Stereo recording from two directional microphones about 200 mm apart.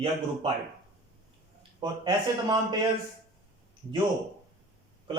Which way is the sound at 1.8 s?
20° right (ahead or behind).